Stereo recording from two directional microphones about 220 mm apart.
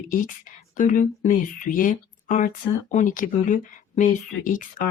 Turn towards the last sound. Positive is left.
turn(degrees=40)  # may be behind; listen again after turning